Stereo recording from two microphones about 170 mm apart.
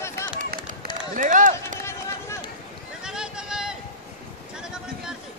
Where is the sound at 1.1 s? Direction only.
50° right (ahead or behind).